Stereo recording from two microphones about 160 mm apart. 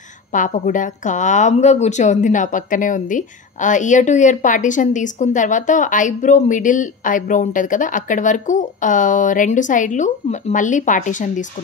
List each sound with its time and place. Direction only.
0.3 s a woman's voice: 55° left (ahead or behind)